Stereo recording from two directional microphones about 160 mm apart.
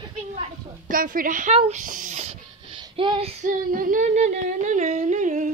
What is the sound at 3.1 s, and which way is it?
Female singing, 40° right (ahead or behind).